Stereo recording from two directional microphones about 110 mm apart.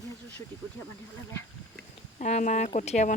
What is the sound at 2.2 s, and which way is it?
Speech, 90° left.